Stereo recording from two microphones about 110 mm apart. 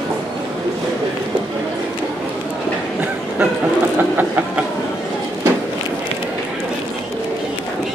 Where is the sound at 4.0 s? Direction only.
15° right (ahead or behind).